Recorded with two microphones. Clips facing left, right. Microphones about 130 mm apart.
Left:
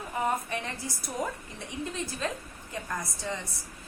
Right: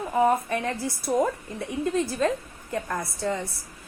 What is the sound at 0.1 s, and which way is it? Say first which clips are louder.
A woman's voice: right 8 dB; 50° right (ahead or behind).